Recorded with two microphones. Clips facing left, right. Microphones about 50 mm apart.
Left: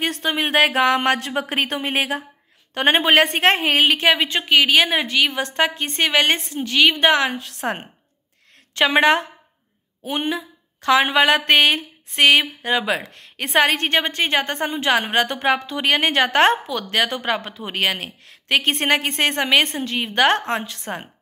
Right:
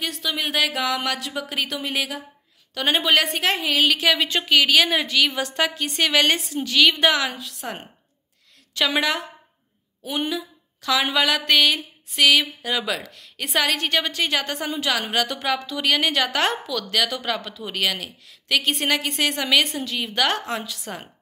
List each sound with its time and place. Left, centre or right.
0.0 s a woman's voice: left
7.3 s speech: left
8.7 s speech: left